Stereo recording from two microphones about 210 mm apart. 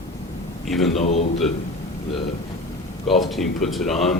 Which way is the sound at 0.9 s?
30° left (ahead or behind).